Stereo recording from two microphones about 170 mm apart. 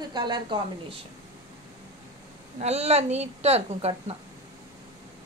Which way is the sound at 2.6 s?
40° right (ahead or behind).